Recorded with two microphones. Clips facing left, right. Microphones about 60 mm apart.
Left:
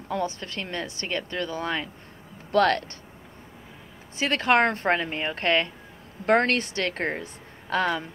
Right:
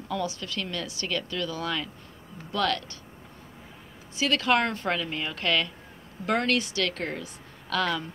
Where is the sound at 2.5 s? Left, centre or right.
Left.